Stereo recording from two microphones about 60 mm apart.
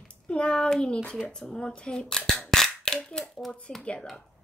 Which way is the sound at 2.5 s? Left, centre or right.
Centre.